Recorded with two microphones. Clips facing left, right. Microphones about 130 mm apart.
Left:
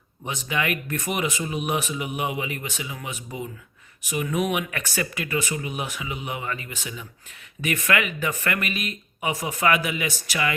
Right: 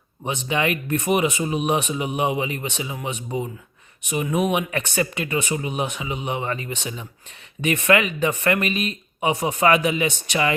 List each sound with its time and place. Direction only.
0.3 s speech: 25° right (ahead or behind)